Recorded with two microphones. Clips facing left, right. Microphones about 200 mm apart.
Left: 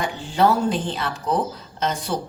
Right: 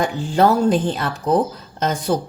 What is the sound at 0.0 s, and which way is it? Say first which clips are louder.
Speech: right 3 dB; 45° right (ahead or behind).